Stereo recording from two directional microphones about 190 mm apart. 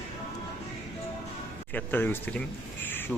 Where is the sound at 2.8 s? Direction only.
10° left (ahead or behind).